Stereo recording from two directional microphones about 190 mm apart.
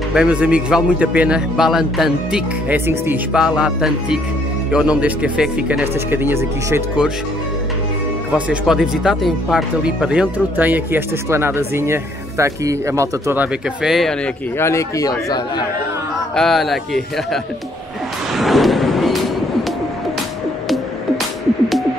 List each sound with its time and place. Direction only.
0.1 s speech: 5° right (ahead or behind)
8.5 s speech: 5° right (ahead or behind)
13.8 s speech: centre (ahead or behind)
14.6 s a man's voice: 15° left (ahead or behind)
16.3 s speech: centre (ahead or behind)
18.3 s a sound: centre (ahead or behind)